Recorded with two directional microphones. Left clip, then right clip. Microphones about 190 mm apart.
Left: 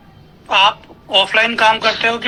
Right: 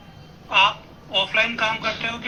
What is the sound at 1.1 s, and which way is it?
Speech, 45° left (ahead or behind).